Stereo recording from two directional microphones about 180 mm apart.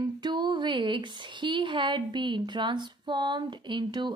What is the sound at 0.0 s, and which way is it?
A woman's voice, 25° right (ahead or behind).